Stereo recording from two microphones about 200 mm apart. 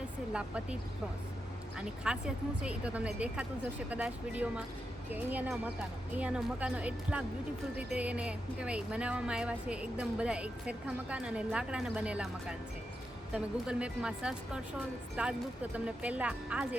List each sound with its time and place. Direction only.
0.3 s a woman's voice: 5° right (ahead or behind)